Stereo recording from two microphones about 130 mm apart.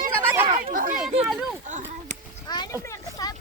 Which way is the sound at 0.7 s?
90° right.